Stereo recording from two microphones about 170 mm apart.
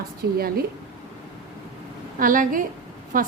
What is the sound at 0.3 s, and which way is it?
Speech, 60° right (ahead or behind).